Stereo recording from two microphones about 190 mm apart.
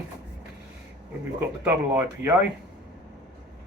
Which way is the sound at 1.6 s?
10° right (ahead or behind).